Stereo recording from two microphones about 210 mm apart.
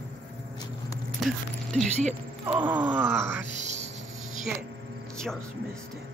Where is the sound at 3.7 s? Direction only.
35° right (ahead or behind).